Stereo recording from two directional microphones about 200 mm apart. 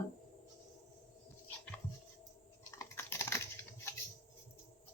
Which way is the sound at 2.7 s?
10° left (ahead or behind).